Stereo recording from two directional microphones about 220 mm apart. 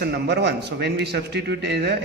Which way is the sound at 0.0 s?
50° right (ahead or behind).